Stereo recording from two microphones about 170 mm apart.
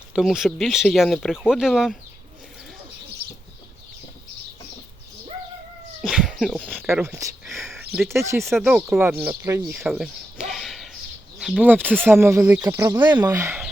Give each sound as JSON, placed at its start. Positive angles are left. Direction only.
{"t": 0.1, "sound": "speech", "side_deg": 0}
{"t": 6.0, "sound": "cat", "side_deg": -5}
{"t": 6.7, "sound": "speech", "side_deg": -10}
{"t": 7.6, "sound": "a sound", "side_deg": 0}
{"t": 8.1, "sound": "speech", "side_deg": -15}
{"t": 8.4, "sound": "speech", "side_deg": 0}